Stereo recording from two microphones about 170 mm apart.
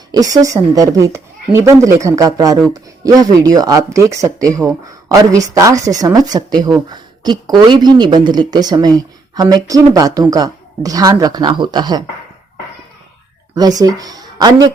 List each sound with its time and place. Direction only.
0.1 s speech: 20° right (ahead or behind)
13.5 s speech: 20° right (ahead or behind)